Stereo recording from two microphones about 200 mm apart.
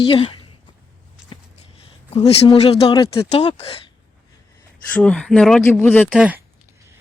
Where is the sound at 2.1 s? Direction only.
30° left (ahead or behind).